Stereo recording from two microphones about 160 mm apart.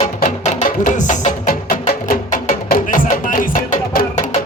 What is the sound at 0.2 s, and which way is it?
Music, 60° left (ahead or behind).